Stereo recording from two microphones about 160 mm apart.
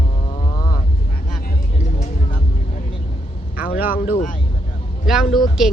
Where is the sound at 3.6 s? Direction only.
10° right (ahead or behind).